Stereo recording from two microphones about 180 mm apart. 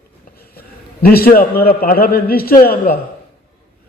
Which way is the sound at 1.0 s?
55° left (ahead or behind).